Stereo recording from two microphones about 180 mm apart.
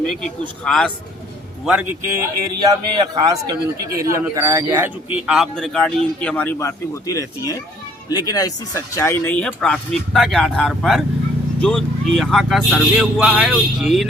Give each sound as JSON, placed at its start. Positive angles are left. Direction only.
{"t": 0.0, "sound": "speech", "side_deg": 5}
{"t": 1.6, "sound": "speech", "side_deg": -10}
{"t": 2.6, "sound": "a man's voice", "side_deg": -20}
{"t": 5.2, "sound": "speech", "side_deg": 0}